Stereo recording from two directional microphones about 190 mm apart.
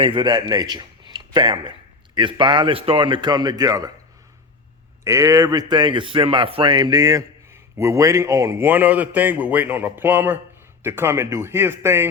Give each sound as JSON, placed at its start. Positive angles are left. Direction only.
{"t": 0.0, "sound": "a man's voice", "side_deg": -25}
{"t": 5.0, "sound": "speech", "side_deg": -15}